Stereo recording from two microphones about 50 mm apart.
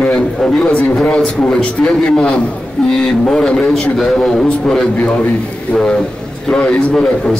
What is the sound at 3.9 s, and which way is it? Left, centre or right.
A man's voice, centre.